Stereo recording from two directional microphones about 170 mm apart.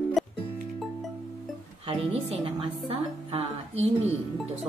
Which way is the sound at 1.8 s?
35° right (ahead or behind).